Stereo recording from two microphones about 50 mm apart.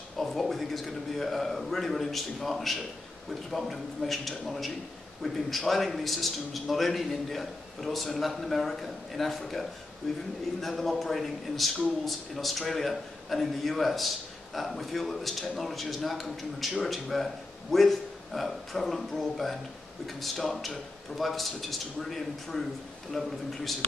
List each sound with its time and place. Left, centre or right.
0.2 s a man's voice: centre